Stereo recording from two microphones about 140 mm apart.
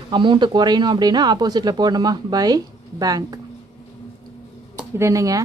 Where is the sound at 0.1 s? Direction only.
35° right (ahead or behind).